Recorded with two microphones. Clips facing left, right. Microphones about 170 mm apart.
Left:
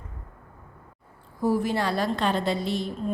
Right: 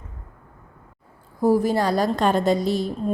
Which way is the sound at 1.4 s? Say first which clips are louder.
Right 5 dB; 40° right (ahead or behind).